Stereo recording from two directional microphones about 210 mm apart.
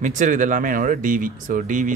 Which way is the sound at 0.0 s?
35° right (ahead or behind).